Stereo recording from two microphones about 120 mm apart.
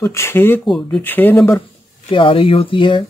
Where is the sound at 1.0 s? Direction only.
15° left (ahead or behind).